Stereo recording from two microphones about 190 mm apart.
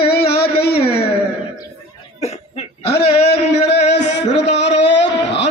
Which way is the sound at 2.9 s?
65° left (ahead or behind).